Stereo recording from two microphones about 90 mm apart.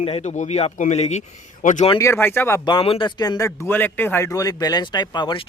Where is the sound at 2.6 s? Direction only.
75° left (ahead or behind).